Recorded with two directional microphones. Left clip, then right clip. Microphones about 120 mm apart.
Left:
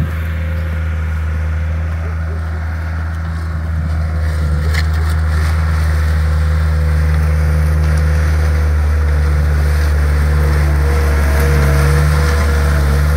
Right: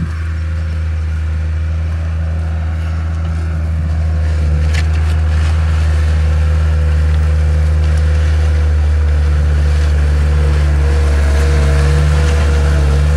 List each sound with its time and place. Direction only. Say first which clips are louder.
5.4 s vehicle: left 1 dB; 10° right (ahead or behind)
7.8 s vehicle: left 2 dB; centre (ahead or behind)
9.5 s vehicle: left 1 dB; 5° right (ahead or behind)